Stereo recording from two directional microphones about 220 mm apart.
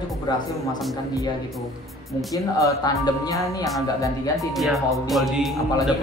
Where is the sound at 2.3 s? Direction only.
15° left (ahead or behind).